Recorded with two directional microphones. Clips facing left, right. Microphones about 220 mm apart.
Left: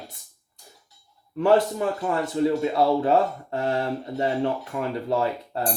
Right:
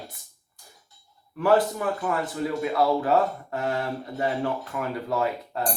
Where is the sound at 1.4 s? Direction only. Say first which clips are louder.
Left 2 dB; 25° left (ahead or behind).